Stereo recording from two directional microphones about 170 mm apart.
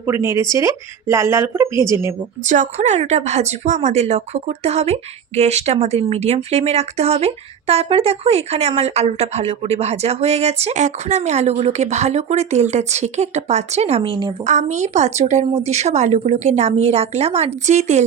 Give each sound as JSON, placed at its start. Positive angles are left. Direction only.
{"t": 0.0, "sound": "speech", "side_deg": -15}
{"t": 2.4, "sound": "a woman's voice", "side_deg": -45}
{"t": 14.4, "sound": "a woman's voice", "side_deg": -45}